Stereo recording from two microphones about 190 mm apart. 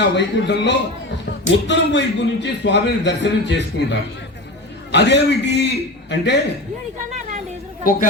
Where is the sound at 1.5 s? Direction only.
70° left (ahead or behind).